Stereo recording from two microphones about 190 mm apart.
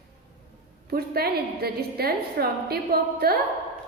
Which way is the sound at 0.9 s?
55° right (ahead or behind).